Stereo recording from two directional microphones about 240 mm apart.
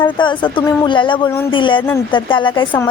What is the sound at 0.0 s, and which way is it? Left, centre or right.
Speech, centre.